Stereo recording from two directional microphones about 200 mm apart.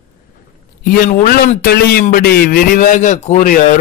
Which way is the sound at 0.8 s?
45° left (ahead or behind).